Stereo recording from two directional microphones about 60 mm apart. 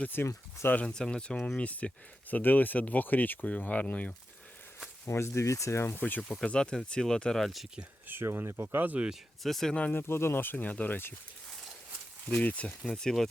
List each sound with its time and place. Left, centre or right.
0.1 s speech: left
0.9 s speech: centre
5.0 s speech: left
5.8 s speech: left
6.4 s speech: centre
8.0 s speech: right
8.6 s speech: right
9.4 s speech: centre
9.9 s speech: left
12.3 s speech: left
12.9 s speech: centre